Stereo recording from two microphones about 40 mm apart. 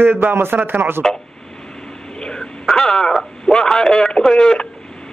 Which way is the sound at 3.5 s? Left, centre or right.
Centre.